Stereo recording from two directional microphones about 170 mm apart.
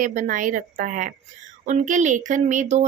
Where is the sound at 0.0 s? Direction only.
50° right (ahead or behind).